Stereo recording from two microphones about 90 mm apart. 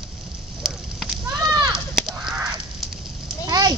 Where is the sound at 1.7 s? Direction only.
5° right (ahead or behind).